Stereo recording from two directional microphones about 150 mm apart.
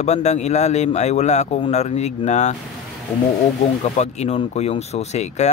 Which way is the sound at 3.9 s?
45° left (ahead or behind).